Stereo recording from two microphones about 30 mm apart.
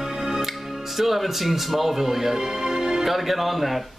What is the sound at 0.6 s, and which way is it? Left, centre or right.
A man's voice, centre.